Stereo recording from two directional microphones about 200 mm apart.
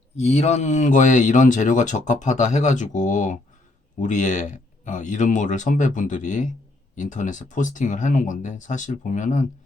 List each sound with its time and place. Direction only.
0.2 s speech: 30° left (ahead or behind)